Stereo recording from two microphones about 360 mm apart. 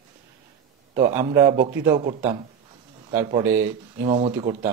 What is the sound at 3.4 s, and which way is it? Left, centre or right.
Speech, centre.